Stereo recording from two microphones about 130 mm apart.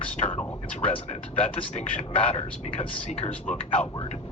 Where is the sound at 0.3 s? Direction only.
45° left (ahead or behind).